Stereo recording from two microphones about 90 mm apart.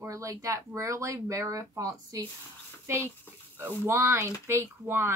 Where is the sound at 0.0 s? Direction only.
35° right (ahead or behind).